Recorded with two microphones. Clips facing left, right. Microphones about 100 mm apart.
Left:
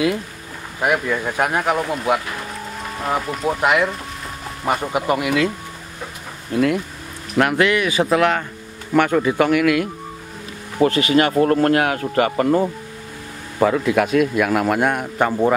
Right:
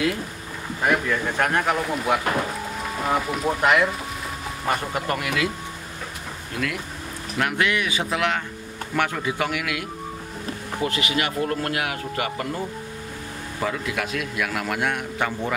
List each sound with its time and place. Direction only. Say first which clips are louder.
0.8 s speech: left 3 dB; 10° left (ahead or behind)
7.3 s speech: left 7 dB; 60° left (ahead or behind)
10.8 s speech: left 10 dB; 35° left (ahead or behind)
13.7 s speech: left 9 dB; 50° left (ahead or behind)